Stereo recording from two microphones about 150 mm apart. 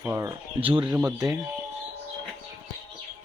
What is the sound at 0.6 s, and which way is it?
Speech, 35° right (ahead or behind).